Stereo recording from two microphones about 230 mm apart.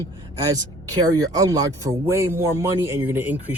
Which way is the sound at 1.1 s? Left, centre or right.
Centre.